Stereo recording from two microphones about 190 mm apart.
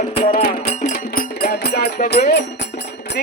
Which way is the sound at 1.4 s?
55° left (ahead or behind).